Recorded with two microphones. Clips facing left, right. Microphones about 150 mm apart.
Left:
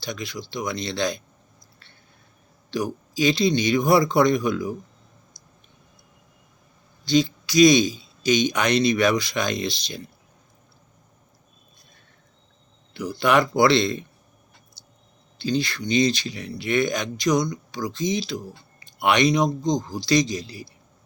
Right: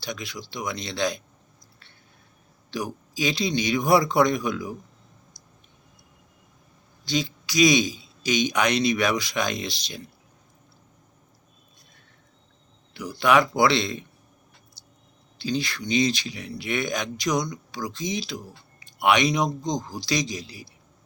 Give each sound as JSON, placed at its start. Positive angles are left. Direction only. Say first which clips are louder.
{"t": 0.0, "sound": "a man's voice", "louder": "left 2 dB", "side_deg": -10}
{"t": 2.6, "sound": "a man's voice", "louder": "left 4 dB", "side_deg": -5}
{"t": 7.0, "sound": "a man's voice", "louder": "left 7 dB", "side_deg": -10}
{"t": 13.1, "sound": "a man's voice", "louder": "left 1 dB", "side_deg": 0}
{"t": 14.8, "sound": "a sound", "louder": "left 1 dB", "side_deg": -40}
{"t": 15.4, "sound": "a man's voice", "louder": "left 3 dB", "side_deg": -5}